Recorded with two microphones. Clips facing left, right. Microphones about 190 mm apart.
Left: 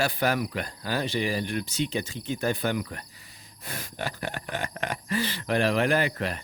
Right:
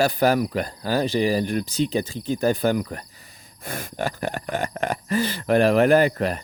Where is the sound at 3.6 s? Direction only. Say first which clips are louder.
Right 7 dB; 50° right (ahead or behind).